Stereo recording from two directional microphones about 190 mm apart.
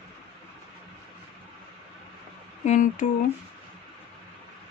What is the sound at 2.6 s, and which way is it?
Speech, 40° left (ahead or behind).